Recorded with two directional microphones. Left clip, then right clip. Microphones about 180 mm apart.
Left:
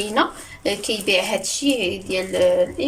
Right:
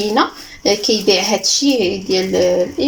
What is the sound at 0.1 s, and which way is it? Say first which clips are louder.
Speech: right 4 dB; 35° right (ahead or behind).